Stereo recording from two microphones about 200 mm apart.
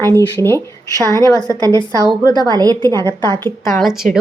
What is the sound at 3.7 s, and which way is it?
Speech, centre (ahead or behind).